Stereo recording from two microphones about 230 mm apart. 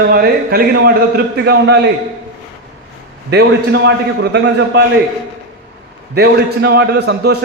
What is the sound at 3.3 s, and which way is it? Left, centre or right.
A man's voice, right.